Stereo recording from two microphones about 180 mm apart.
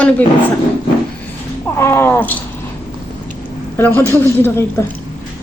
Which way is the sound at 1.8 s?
15° left (ahead or behind).